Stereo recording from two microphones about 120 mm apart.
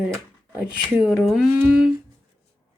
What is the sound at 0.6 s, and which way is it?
Speech, 10° right (ahead or behind).